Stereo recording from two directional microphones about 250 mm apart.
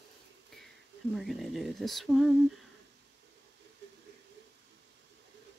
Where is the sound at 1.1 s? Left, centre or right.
Centre.